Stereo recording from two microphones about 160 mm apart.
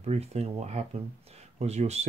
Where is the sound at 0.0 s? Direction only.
40° right (ahead or behind).